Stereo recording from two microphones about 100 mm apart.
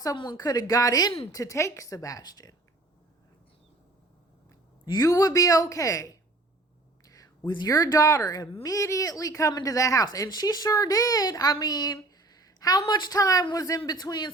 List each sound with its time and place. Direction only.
0.3 s speech: 40° left (ahead or behind)
4.9 s speech: 35° left (ahead or behind)
7.0 s whispering: 35° left (ahead or behind)
7.7 s a man's voice: 35° left (ahead or behind)